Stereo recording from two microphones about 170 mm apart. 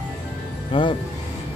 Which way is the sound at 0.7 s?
30° left (ahead or behind).